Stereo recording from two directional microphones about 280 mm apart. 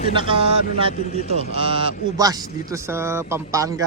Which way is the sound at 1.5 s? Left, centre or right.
Centre.